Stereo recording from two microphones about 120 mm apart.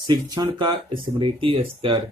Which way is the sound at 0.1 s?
35° right (ahead or behind).